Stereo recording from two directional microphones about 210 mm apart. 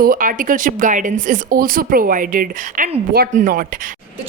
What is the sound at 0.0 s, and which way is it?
Speech, 40° right (ahead or behind).